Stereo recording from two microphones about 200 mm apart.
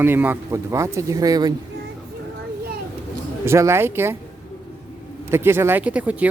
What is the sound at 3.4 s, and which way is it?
Speech, 15° right (ahead or behind).